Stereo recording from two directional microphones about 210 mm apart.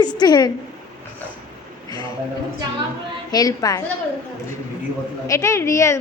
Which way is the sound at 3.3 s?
15° left (ahead or behind).